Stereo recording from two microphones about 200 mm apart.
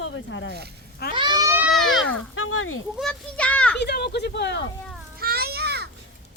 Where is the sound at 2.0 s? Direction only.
90° left.